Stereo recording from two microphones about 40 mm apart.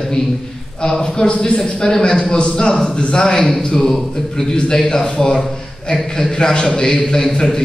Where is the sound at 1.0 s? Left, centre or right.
Centre.